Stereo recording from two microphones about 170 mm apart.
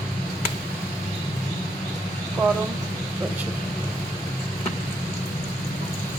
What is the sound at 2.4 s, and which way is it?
Speech, 20° right (ahead or behind).